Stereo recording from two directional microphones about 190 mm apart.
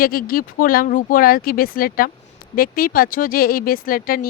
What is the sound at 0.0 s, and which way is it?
Speech, 50° left (ahead or behind).